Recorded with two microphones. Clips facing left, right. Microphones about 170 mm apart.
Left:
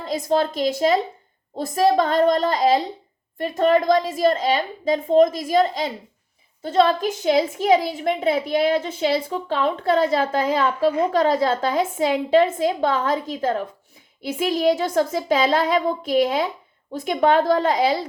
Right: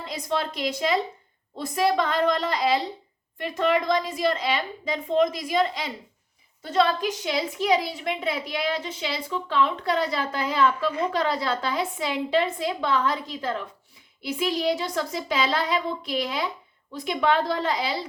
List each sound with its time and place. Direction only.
0.0 s a child's voice: 40° left (ahead or behind)
6.7 s a woman's voice: 30° left (ahead or behind)
7.0 s a child's voice: 45° left (ahead or behind)